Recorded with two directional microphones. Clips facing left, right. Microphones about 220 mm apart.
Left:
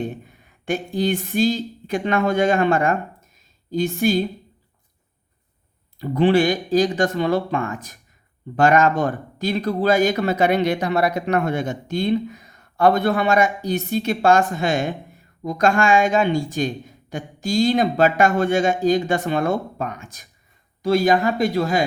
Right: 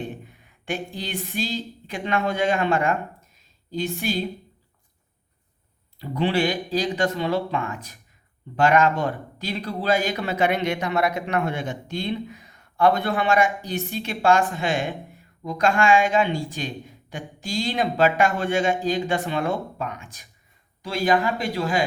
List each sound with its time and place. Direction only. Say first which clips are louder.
0.6 s speech: left 8 dB; 45° left (ahead or behind)
6.0 s speech: left 6 dB; 50° left (ahead or behind)